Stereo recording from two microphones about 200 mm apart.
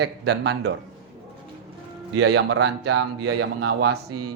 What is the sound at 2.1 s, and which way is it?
Speech, 90° right.